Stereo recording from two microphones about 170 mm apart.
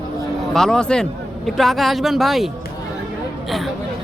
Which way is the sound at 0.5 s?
5° left (ahead or behind).